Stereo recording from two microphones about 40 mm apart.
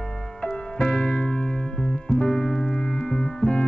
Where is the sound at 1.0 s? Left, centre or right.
Centre.